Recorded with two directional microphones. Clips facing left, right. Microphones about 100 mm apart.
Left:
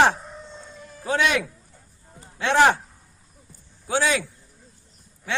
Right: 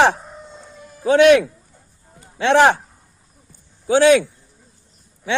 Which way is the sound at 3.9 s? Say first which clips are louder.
Right 10 dB; 70° right (ahead or behind).